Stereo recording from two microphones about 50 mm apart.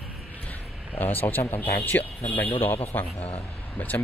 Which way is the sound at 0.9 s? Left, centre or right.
Left.